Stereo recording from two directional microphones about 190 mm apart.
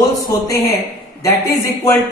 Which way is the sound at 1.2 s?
15° left (ahead or behind).